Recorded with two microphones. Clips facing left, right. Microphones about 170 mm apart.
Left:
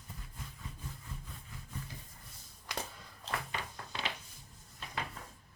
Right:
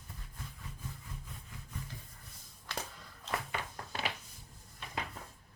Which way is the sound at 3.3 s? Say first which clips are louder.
Right 1 dB; 35° left (ahead or behind).